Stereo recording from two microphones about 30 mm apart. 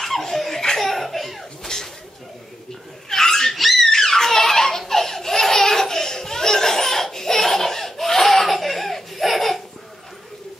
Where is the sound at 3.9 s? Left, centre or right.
Centre.